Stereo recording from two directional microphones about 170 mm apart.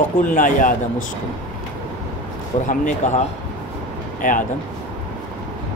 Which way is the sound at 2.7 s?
45° left (ahead or behind).